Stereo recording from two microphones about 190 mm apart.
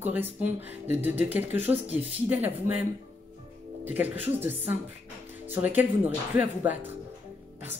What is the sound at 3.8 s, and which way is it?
Speech, 10° right (ahead or behind).